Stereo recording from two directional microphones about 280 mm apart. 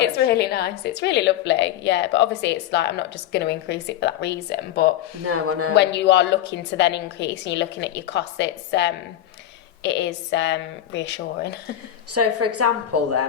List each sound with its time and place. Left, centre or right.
0.0 s a woman's voice: left
5.2 s speech: right
5.7 s a woman's voice: left
12.1 s a woman's voice: right